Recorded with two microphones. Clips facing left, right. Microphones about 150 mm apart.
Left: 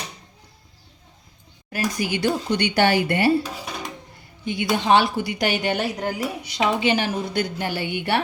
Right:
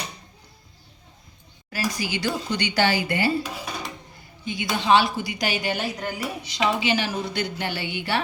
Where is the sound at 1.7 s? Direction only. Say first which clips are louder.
Left 3 dB; 55° left (ahead or behind).